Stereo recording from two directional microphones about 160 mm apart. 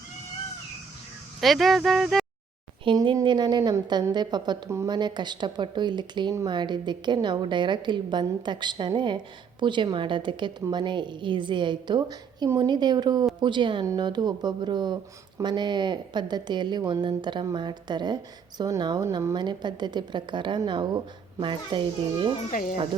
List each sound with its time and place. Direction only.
1.4 s speech: centre (ahead or behind)
2.8 s a woman's voice: 30° right (ahead or behind)
22.5 s speech: 60° left (ahead or behind)